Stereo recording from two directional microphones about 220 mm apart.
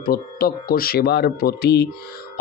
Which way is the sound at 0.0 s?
40° left (ahead or behind).